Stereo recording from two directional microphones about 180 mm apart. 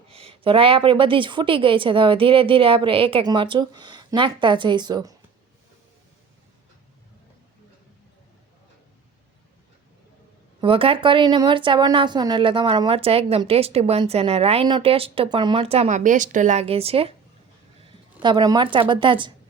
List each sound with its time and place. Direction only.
0.1 s a woman's voice: 30° right (ahead or behind)
10.6 s speech: 30° right (ahead or behind)
18.2 s a woman's voice: 25° right (ahead or behind)